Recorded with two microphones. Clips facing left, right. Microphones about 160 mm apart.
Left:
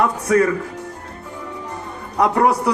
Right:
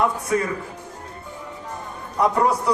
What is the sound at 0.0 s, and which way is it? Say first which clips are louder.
Speech: left 5 dB; 80° left.